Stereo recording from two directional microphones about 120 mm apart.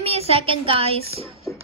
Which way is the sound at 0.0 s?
55° right (ahead or behind).